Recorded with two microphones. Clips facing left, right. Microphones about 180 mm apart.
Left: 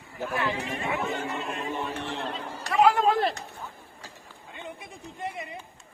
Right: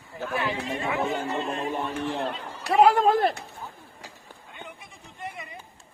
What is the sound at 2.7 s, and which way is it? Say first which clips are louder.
Speech: right 2 dB; 45° right (ahead or behind).